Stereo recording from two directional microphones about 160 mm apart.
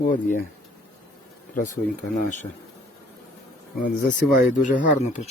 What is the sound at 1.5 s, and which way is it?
Speech, 55° left (ahead or behind).